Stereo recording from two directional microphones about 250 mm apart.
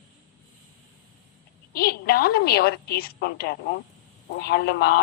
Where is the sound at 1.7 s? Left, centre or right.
Left.